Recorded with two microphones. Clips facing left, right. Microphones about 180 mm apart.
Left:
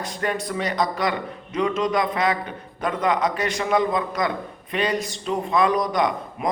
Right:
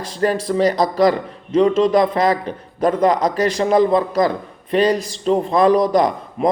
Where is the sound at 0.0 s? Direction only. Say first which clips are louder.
Right 7 dB; 35° right (ahead or behind).